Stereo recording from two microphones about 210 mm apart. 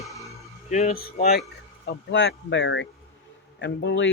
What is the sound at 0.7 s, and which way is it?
Speech, 30° left (ahead or behind).